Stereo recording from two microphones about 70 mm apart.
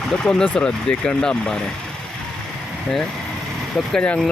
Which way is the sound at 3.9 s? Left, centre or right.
Centre.